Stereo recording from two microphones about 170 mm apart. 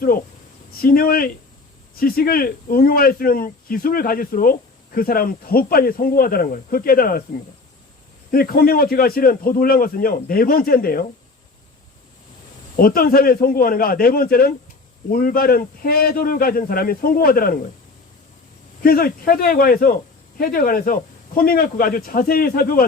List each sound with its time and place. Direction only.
0.7 s a man's voice: 60° left (ahead or behind)
8.3 s a man's voice: 60° left (ahead or behind)
12.7 s a man's voice: 60° left (ahead or behind)
18.8 s a man's voice: 60° left (ahead or behind)